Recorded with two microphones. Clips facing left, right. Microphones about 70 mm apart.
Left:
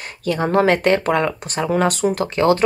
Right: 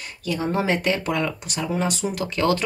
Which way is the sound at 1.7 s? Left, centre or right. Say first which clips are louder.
Left 8 dB; left.